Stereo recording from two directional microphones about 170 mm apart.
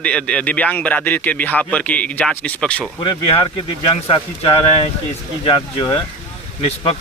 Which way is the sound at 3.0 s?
30° left (ahead or behind).